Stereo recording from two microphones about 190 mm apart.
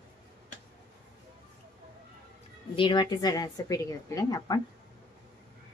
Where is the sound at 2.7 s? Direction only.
25° left (ahead or behind).